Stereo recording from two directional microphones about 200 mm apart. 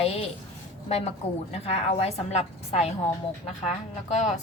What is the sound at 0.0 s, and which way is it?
A woman's voice, 30° left (ahead or behind).